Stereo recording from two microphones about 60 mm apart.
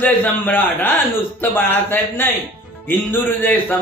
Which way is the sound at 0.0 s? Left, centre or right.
Left.